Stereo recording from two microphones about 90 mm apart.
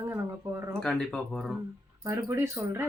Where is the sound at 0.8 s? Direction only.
10° left (ahead or behind).